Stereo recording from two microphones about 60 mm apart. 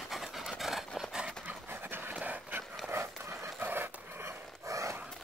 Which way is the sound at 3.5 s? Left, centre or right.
Right.